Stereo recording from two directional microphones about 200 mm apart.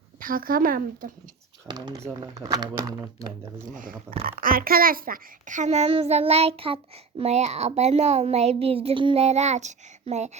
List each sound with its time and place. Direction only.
0.2 s a woman's voice: 45° right (ahead or behind)
1.6 s speech: 20° right (ahead or behind)
3.7 s a woman's voice: 40° right (ahead or behind)